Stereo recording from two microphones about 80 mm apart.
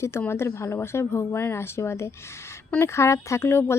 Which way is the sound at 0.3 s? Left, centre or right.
Left.